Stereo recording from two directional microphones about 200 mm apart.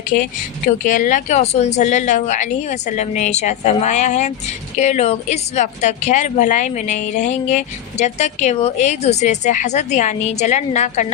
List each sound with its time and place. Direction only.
0.1 s a woman's voice: 40° left (ahead or behind)